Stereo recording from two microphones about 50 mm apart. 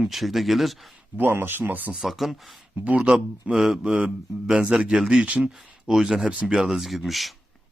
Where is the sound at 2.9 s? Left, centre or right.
Centre.